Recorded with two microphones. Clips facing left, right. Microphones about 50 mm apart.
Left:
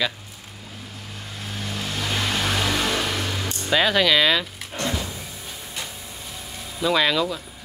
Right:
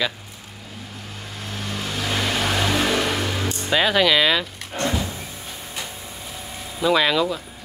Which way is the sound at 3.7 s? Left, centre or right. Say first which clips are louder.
Right 1 dB; centre.